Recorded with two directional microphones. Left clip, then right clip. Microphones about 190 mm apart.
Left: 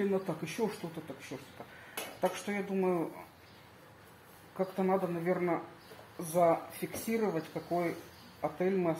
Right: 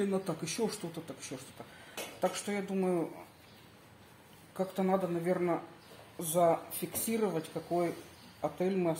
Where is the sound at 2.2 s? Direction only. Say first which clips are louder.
Even; 10° right (ahead or behind).